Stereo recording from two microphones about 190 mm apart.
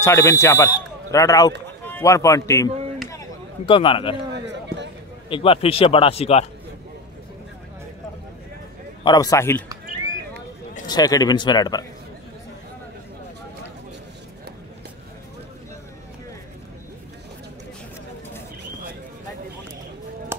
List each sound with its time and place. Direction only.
0.0 s speech: 15° left (ahead or behind)
3.6 s speech: 25° left (ahead or behind)
4.3 s a sound: 65° right (ahead or behind)
5.3 s speech: 30° left (ahead or behind)
9.0 s speech: 20° left (ahead or behind)
10.9 s speech: 20° left (ahead or behind)